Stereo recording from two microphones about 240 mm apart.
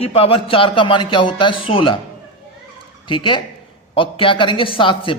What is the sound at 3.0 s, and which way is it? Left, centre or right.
A man's voice, left.